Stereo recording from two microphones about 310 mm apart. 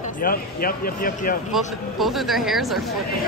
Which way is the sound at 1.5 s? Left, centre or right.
Centre.